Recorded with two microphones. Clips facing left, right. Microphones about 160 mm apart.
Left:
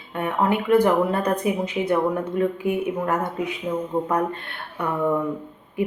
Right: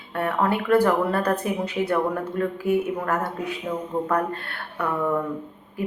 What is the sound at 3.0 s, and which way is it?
Speech, 15° left (ahead or behind).